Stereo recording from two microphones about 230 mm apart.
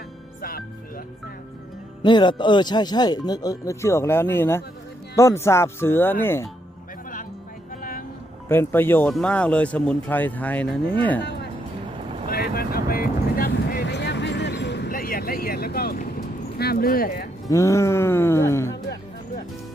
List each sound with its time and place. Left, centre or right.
0.4 s music: left
2.0 s speech: centre
7.8 s vehicle: left
8.4 s speech: centre
12.3 s vehicle: left
16.6 s speech: left
17.5 s speech: centre